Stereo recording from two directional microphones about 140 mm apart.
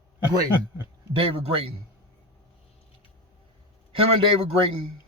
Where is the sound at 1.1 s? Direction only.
40° right (ahead or behind).